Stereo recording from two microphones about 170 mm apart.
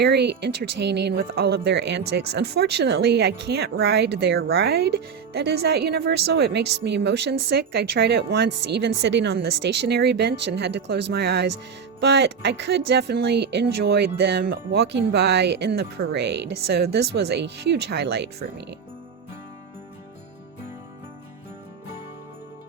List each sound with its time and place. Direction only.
0.0 s speech: 80° right
6.8 s speech: 90° right; by 11.4 s 70° right (ahead or behind)
11.9 s speech: 90° right